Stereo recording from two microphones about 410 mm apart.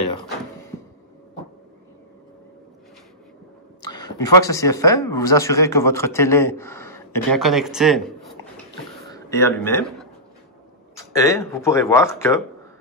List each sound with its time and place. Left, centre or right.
3.8 s a sound: centre
4.4 s a man's voice: centre
11.1 s speech: centre